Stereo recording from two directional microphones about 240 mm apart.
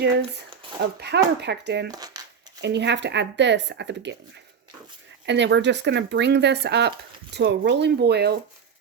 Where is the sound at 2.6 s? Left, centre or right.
Right.